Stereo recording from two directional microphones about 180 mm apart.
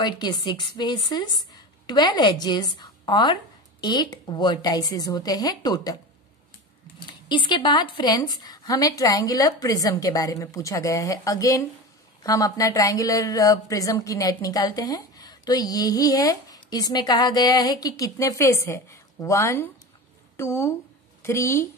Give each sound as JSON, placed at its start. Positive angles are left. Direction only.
{"t": 0.0, "sound": "a woman's voice", "side_deg": 25}
{"t": 7.0, "sound": "a woman's voice", "side_deg": 25}